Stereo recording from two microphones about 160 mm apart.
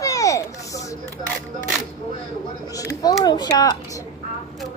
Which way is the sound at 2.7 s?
20° left (ahead or behind).